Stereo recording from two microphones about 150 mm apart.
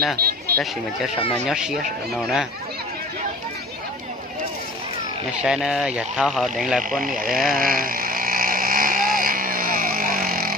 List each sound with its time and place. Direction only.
0.2 s a sound: 90° right
1.5 s speech: 5° right (ahead or behind)
5.4 s speech: 5° right (ahead or behind)
7.3 s vehicle: 70° right (ahead or behind)